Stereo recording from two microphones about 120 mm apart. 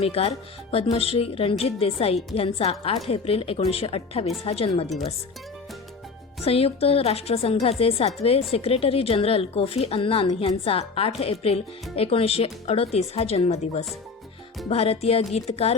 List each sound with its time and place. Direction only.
0.0 s a woman's voice: 55° left (ahead or behind)
6.4 s a woman's voice: 55° left (ahead or behind)